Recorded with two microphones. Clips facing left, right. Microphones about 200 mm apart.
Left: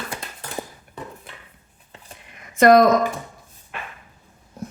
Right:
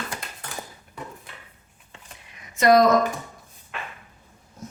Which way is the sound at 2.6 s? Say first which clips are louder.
Left 4 dB; 55° left (ahead or behind).